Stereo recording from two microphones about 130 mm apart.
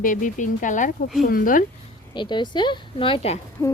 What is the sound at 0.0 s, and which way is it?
Speech, 85° left.